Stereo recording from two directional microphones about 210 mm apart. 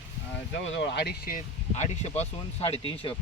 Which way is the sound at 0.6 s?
60° left (ahead or behind).